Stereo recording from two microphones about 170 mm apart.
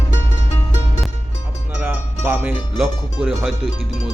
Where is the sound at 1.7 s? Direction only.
10° right (ahead or behind).